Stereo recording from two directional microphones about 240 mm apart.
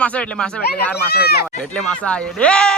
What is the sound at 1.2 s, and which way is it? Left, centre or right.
Speech, left.